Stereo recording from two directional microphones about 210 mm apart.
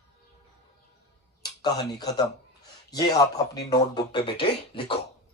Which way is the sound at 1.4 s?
20° left (ahead or behind).